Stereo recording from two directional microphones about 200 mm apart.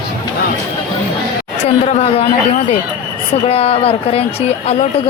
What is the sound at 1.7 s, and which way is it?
Speech, 30° left (ahead or behind).